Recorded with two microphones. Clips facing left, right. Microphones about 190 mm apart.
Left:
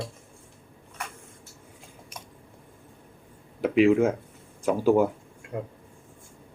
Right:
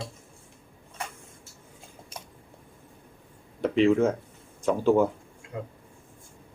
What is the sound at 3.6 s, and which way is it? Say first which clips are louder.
Speech: left 1 dB; 10° left (ahead or behind).